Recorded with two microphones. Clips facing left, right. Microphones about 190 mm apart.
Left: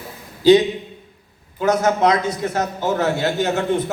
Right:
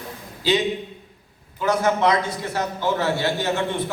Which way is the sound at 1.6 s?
45° left (ahead or behind).